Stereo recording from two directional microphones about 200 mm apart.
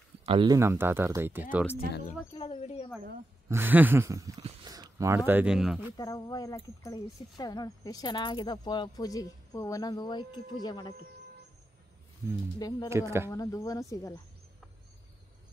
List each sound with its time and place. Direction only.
0.2 s speech: 25° right (ahead or behind)
0.6 s speech: 10° right (ahead or behind)
2.3 s a sound: 30° left (ahead or behind)
3.4 s speech: 10° right (ahead or behind)
5.9 s speech: 20° left (ahead or behind)
12.5 s speech: 20° left (ahead or behind)
12.9 s speech: 15° right (ahead or behind)
13.3 s speech: 15° left (ahead or behind)